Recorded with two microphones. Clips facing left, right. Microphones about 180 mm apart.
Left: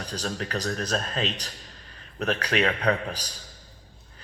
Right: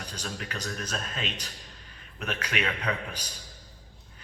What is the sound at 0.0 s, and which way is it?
A man's voice, 35° left (ahead or behind).